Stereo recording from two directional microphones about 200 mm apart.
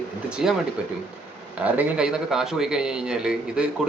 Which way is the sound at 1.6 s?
5° right (ahead or behind).